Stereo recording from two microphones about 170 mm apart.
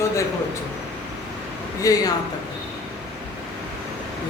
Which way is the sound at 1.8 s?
20° left (ahead or behind).